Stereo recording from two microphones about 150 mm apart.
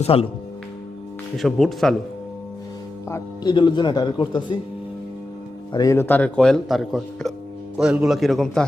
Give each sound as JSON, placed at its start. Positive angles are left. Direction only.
{"t": 0.0, "sound": "speech", "side_deg": 40}
{"t": 1.4, "sound": "a man's voice", "side_deg": 0}
{"t": 3.4, "sound": "speech", "side_deg": 30}
{"t": 5.7, "sound": "a man's voice", "side_deg": 20}